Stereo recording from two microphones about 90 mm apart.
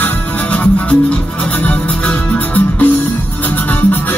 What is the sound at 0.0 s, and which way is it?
Music, 15° left (ahead or behind).